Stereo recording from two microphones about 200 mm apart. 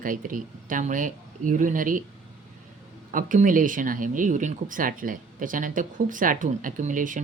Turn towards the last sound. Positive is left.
turn(degrees=-40)  # may be behind; listen again after turning